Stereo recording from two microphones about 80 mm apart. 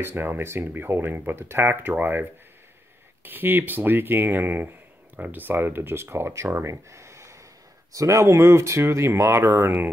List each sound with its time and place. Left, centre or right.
0.0 s speech: right
3.3 s speech: right